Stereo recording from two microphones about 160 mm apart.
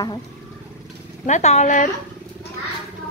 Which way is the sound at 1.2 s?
45° left (ahead or behind).